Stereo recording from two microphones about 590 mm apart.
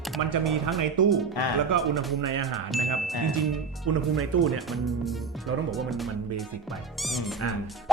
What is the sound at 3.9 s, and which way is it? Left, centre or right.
Speech, right.